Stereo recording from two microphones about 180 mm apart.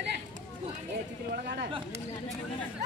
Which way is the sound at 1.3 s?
60° right (ahead or behind).